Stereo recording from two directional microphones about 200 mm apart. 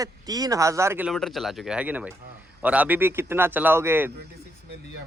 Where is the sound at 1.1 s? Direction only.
Centre (ahead or behind).